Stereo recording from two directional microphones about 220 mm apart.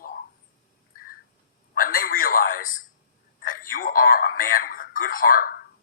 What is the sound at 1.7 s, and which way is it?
Telephone, 40° left (ahead or behind).